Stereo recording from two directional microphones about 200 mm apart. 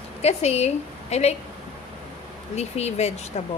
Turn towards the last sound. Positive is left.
turn(degrees=35)  # may be behind; listen again after turning